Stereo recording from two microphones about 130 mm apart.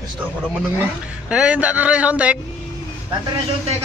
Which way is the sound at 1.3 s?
10° right (ahead or behind).